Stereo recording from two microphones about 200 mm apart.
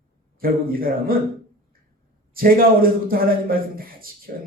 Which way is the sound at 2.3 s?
45° right (ahead or behind).